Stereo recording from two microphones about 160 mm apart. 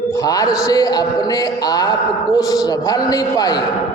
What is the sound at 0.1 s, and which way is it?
A man's voice, 20° left (ahead or behind).